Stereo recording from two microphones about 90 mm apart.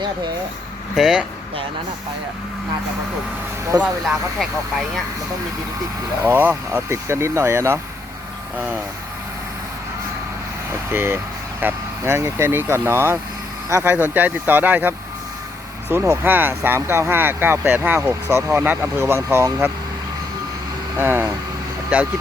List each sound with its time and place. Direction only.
0.9 s speech: 5° right (ahead or behind)
3.7 s speech: 45° right (ahead or behind)
6.2 s speech: 25° right (ahead or behind)
8.5 s speech: 20° right (ahead or behind)
10.9 s speech: 25° right (ahead or behind)
13.9 s speech: 20° right (ahead or behind)
21.0 s speech: 25° right (ahead or behind)